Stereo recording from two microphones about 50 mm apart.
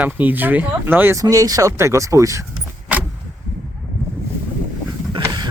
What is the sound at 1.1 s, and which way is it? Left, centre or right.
Speech, right.